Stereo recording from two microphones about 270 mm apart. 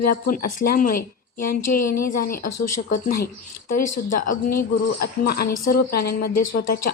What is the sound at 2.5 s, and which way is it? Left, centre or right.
Speech, left.